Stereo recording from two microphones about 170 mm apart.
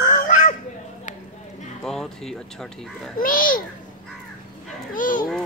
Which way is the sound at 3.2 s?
55° left (ahead or behind).